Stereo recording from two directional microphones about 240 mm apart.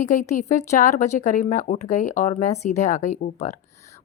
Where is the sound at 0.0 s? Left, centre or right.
Left.